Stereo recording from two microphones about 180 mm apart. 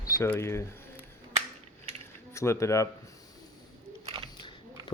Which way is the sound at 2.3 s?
15° left (ahead or behind).